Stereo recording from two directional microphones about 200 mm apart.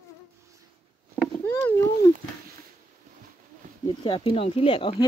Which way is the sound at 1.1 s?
10° left (ahead or behind).